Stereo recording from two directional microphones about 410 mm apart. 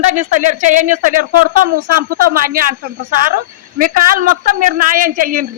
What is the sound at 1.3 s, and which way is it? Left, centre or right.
Speech, right.